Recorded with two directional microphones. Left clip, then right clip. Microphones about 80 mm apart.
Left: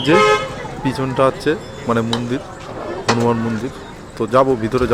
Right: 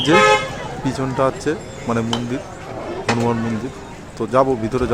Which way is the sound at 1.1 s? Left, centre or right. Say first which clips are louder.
Left 4 dB; centre.